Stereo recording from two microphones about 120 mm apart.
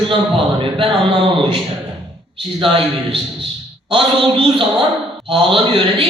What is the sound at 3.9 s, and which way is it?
A man's voice, 45° right (ahead or behind).